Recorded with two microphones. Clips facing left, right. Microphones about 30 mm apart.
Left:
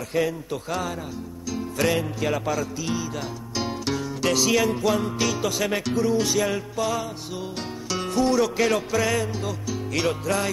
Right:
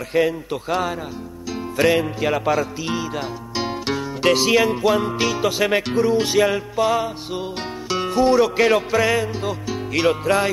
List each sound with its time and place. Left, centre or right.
0.1 s music: right